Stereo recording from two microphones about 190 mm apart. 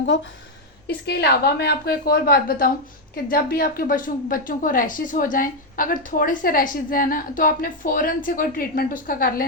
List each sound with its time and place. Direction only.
1.0 s a woman's voice: 60° left (ahead or behind)